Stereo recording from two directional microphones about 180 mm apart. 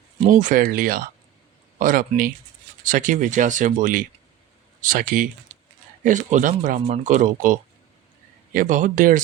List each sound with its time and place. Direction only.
0.2 s speech: 45° right (ahead or behind)